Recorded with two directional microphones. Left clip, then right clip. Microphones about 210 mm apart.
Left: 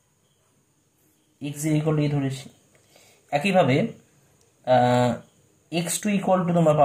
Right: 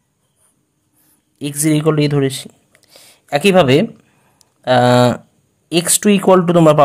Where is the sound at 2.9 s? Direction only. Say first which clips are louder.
Right 8 dB; 50° right (ahead or behind).